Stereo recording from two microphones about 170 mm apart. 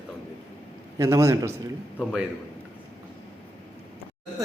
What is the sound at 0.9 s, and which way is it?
Speech, 15° right (ahead or behind).